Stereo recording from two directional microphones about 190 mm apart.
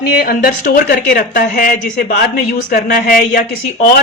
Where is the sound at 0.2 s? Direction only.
50° left (ahead or behind).